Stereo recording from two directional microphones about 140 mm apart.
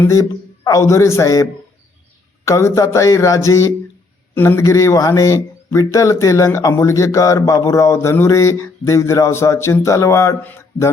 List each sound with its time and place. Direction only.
0.0 s speech: 25° left (ahead or behind)